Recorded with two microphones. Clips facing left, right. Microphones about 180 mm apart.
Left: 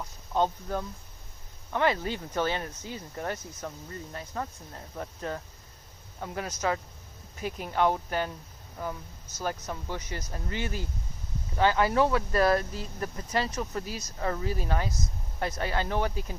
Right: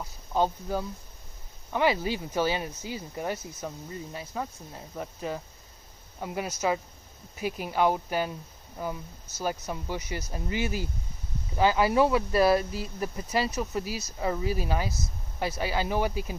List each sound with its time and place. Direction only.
0.3 s speech: 5° right (ahead or behind)